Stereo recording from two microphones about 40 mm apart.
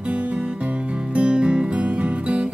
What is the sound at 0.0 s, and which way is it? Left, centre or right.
Music, right.